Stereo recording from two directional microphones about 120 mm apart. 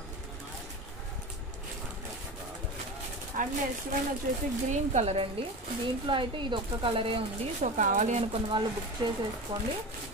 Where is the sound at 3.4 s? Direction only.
90° right.